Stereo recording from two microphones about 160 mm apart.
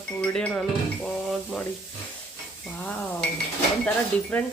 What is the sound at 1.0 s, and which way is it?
Stir, centre (ahead or behind).